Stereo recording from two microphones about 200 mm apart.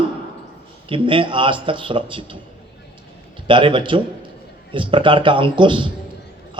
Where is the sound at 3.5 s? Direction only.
25° right (ahead or behind).